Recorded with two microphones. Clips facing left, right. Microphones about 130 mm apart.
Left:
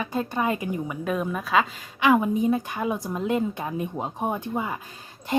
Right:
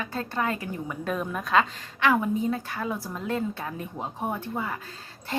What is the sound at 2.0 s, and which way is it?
Speech, 15° left (ahead or behind).